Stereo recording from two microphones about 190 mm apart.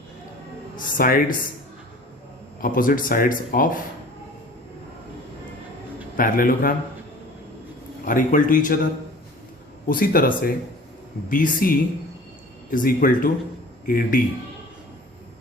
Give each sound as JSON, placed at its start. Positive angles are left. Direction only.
{"t": 0.9, "sound": "speech", "side_deg": 50}
{"t": 2.6, "sound": "speech", "side_deg": 45}
{"t": 6.1, "sound": "speech", "side_deg": 45}
{"t": 8.0, "sound": "speech", "side_deg": 45}
{"t": 9.9, "sound": "speech", "side_deg": 50}